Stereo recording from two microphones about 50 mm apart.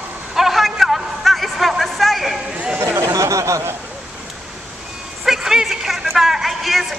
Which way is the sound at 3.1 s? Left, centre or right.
Right.